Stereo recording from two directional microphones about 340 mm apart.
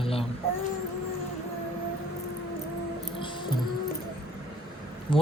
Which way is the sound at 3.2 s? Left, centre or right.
Centre.